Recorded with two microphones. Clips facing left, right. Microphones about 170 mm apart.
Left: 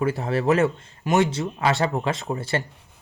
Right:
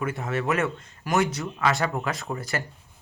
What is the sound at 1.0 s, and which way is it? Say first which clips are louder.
Speech: left 4 dB; 20° left (ahead or behind).